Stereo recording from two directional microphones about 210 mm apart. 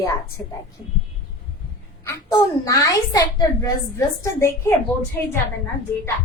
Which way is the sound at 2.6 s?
15° left (ahead or behind).